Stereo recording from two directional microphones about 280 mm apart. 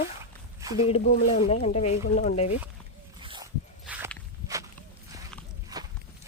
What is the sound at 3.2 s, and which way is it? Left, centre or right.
Dog, centre.